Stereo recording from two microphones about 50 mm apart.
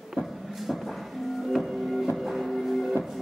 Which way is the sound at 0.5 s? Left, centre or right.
Centre.